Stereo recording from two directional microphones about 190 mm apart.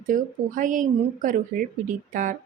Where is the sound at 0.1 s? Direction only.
45° right (ahead or behind).